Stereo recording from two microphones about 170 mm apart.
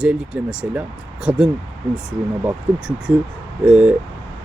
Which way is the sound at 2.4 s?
5° right (ahead or behind).